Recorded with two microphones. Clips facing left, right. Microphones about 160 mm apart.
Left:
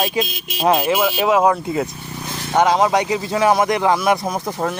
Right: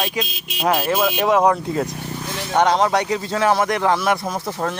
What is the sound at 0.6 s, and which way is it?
Speech, 20° left (ahead or behind).